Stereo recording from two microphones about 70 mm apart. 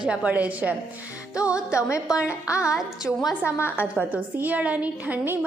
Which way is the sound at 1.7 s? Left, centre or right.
Left.